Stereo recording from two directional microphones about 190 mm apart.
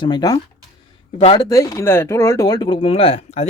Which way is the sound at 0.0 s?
20° left (ahead or behind).